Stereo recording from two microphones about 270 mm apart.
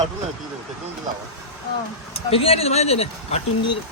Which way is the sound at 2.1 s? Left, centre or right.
Left.